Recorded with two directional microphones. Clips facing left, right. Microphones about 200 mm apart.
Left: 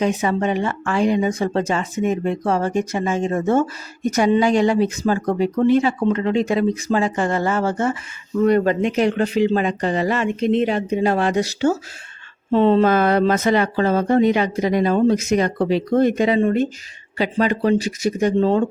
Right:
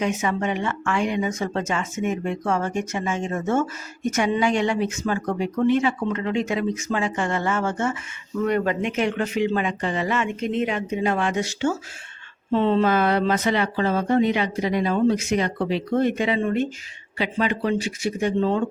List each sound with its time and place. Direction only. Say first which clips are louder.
0.0 s speech: left 4 dB; 35° left (ahead or behind)